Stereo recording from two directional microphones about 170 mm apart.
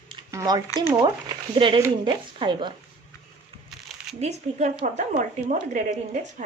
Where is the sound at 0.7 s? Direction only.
25° right (ahead or behind).